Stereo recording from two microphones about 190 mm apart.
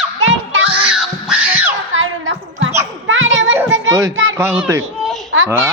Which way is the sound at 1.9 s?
90° right.